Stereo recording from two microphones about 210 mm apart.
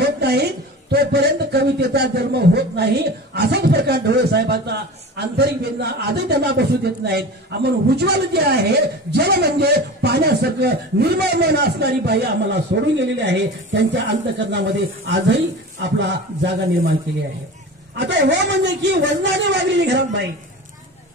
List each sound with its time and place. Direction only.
0.0 s a sound: 50° right (ahead or behind)
0.9 s a man's voice: 50° right (ahead or behind)
17.9 s a man's voice: 60° right (ahead or behind)